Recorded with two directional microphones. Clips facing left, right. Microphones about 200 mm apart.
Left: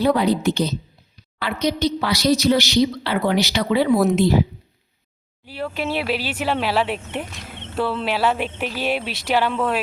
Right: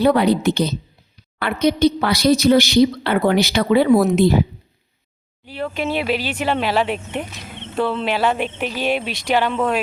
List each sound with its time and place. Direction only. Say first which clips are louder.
0.2 s a woman's voice: right 2 dB; 65° right (ahead or behind)
5.5 s speech: right 2 dB; 5° left (ahead or behind)